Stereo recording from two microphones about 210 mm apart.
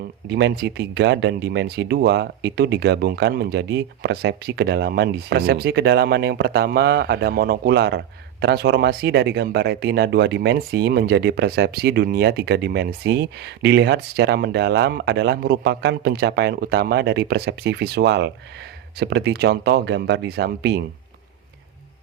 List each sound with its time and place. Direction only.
0.3 s speech: 55° right (ahead or behind)